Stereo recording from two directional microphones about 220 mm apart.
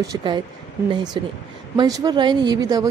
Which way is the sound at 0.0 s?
20° right (ahead or behind).